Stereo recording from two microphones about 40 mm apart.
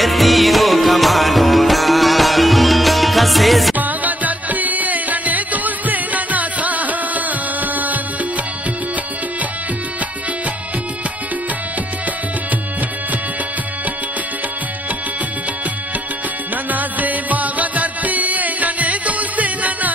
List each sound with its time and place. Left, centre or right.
0.0 s music: centre
3.7 s music: right
16.7 s music: right